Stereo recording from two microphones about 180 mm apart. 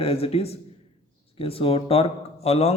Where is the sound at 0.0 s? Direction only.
35° left (ahead or behind).